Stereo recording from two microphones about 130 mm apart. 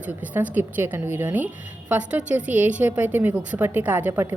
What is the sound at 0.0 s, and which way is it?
A woman's voice, 10° right (ahead or behind).